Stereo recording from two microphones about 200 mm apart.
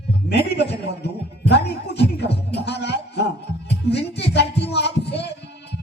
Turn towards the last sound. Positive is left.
turn(degrees=55)  # may be behind; listen again after turning